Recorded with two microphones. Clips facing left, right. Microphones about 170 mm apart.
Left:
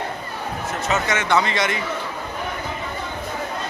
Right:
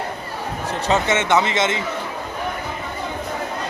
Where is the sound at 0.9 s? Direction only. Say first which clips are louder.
Right 3 dB; 30° right (ahead or behind).